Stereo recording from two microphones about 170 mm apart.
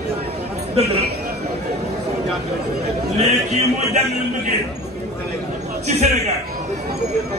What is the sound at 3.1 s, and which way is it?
Speech, 40° right (ahead or behind).